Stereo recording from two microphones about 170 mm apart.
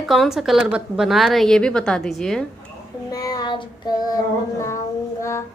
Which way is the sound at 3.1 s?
20° left (ahead or behind).